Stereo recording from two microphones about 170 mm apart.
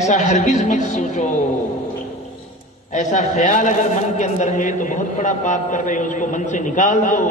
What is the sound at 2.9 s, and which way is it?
A man's voice, 45° left (ahead or behind).